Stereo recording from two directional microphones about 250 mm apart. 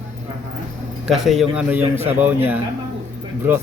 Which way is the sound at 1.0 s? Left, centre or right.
Centre.